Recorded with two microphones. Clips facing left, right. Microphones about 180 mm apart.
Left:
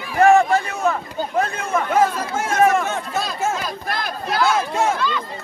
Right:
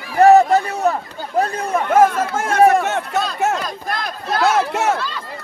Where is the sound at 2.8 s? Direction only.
70° right (ahead or behind).